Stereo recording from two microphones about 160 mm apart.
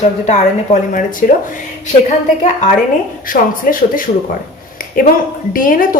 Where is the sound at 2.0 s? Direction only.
45° left (ahead or behind).